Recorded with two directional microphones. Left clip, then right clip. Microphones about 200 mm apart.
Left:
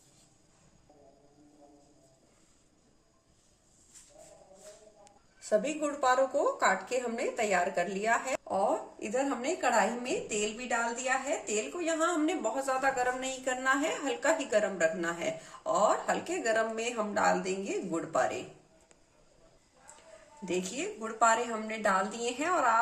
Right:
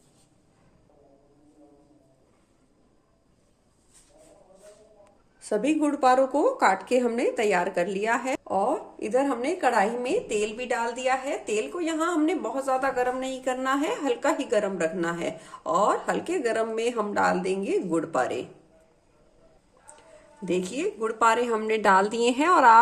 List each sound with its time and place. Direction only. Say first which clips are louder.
5.4 s speech: right 5 dB; 40° right (ahead or behind)
20.4 s a woman's voice: right 7 dB; 40° right (ahead or behind)